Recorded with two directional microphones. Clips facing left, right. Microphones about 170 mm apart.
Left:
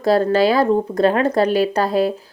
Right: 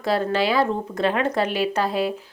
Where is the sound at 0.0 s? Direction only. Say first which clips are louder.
Left 7 dB; 40° left (ahead or behind).